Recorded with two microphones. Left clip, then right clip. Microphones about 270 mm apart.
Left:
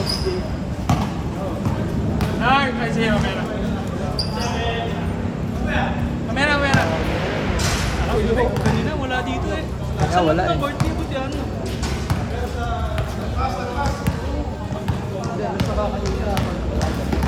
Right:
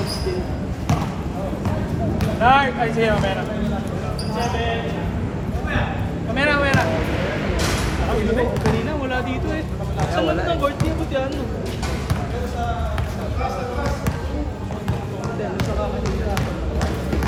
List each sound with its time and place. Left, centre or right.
2.1 s a sound: centre
6.3 s speech: centre
10.2 s speech: left